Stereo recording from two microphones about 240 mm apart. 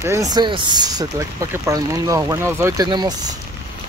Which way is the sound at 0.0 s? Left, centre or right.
Centre.